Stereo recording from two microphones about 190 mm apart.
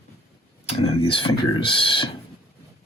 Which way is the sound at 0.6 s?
30° left (ahead or behind).